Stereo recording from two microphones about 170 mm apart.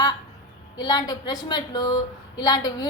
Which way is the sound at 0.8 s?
25° left (ahead or behind).